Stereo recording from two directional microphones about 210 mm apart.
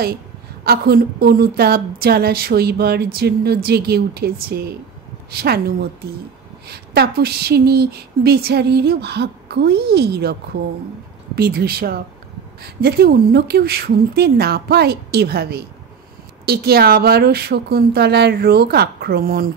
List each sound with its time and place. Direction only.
0.7 s a woman's voice: 50° right (ahead or behind)
11.3 s a woman's voice: 45° right (ahead or behind)